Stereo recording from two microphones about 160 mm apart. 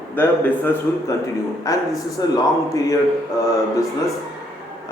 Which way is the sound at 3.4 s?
20° left (ahead or behind).